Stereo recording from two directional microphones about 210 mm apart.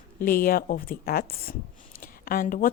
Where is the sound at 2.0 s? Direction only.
40° left (ahead or behind).